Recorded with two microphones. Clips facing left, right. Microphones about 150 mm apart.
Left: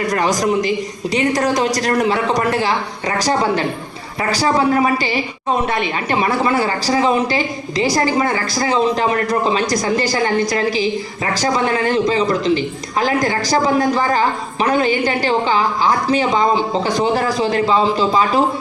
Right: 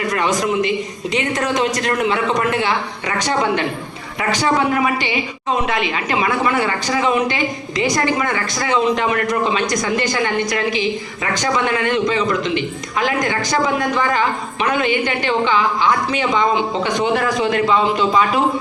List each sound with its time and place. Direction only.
0.1 s a man's voice: 35° left (ahead or behind)